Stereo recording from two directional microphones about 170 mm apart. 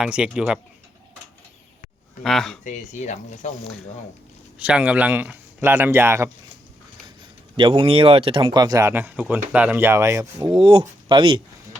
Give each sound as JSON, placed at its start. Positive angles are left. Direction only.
{"t": 0.0, "sound": "speech", "side_deg": -5}
{"t": 2.2, "sound": "speech", "side_deg": 0}
{"t": 2.6, "sound": "speech", "side_deg": 45}
{"t": 4.6, "sound": "speech", "side_deg": -10}
{"t": 7.5, "sound": "speech", "side_deg": -30}
{"t": 10.6, "sound": "speech", "side_deg": -35}